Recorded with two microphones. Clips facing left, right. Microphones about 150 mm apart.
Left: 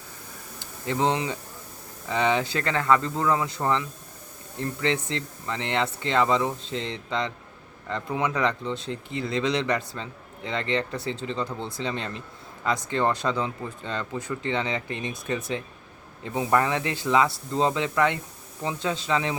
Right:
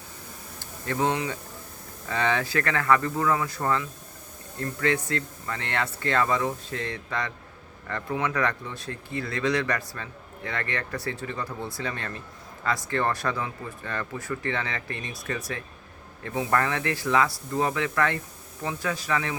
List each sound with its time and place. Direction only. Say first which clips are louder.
0.6 s speech: left 1 dB; 20° left (ahead or behind)